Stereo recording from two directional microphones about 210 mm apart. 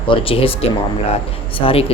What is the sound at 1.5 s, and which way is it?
Speech, 25° left (ahead or behind).